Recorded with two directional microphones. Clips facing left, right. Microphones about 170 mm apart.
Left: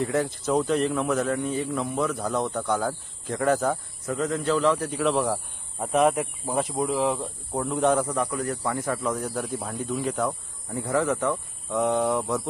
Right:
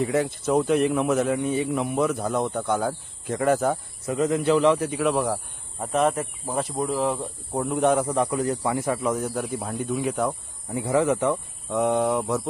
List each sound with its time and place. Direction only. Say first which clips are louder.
0.0 s speech: right 2 dB; 5° right (ahead or behind)
2.5 s speech: right 1 dB; centre (ahead or behind)
7.9 s speech: right 2 dB; 20° right (ahead or behind)
11.7 s speech: right 1 dB; 5° right (ahead or behind)